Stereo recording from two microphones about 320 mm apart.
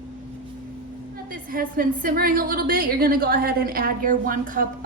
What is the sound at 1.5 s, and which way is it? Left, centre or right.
A woman's voice, right.